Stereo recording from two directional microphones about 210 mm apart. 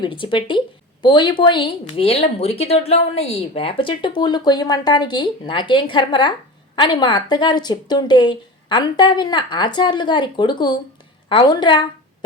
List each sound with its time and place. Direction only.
0.0 s a woman's voice: 25° left (ahead or behind)